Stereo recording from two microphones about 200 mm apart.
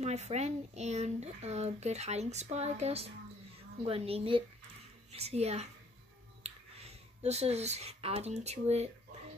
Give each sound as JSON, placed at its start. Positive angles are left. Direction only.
{"t": 0.0, "sound": "a woman's voice", "side_deg": -35}